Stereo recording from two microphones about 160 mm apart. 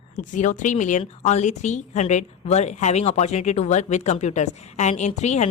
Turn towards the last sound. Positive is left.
turn(degrees=45)  # may be behind; listen again after turning